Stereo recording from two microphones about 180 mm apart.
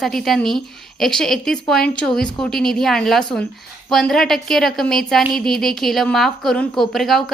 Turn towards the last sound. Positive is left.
turn(degrees=0)  # may be behind; listen again after turning